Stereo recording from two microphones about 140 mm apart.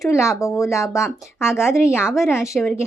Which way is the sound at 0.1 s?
20° left (ahead or behind).